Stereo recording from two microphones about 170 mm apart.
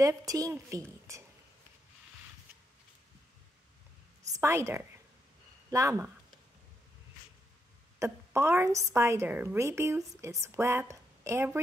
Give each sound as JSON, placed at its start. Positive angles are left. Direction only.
{"t": 0.0, "sound": "a woman's voice", "side_deg": -20}
{"t": 4.4, "sound": "a woman's voice", "side_deg": -15}
{"t": 8.0, "sound": "a woman's voice", "side_deg": -15}